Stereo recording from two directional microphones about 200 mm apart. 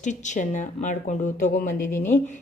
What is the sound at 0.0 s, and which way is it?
A woman's voice, 35° left (ahead or behind).